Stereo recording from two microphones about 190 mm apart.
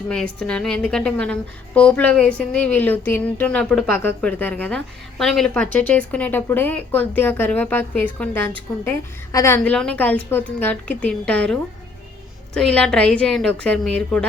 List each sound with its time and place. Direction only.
0.1 s a woman's voice: 5° left (ahead or behind)